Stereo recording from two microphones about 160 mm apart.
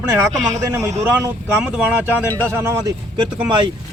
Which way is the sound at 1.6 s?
5° right (ahead or behind).